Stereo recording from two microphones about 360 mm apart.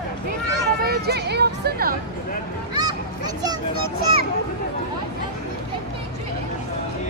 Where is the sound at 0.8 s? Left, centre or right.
Right.